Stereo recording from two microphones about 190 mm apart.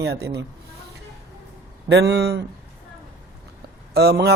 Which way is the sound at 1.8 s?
65° right (ahead or behind).